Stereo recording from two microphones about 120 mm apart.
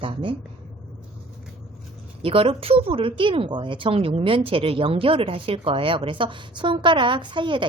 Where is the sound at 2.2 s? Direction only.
50° right (ahead or behind).